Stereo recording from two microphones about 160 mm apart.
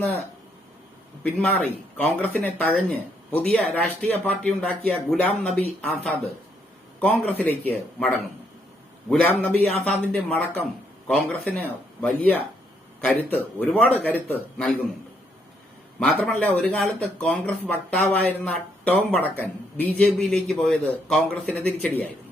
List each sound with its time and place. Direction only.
1.2 s speech: 10° left (ahead or behind)
7.0 s speech: 10° left (ahead or behind)
13.7 s speech: 10° left (ahead or behind)
16.2 s speech: 10° left (ahead or behind)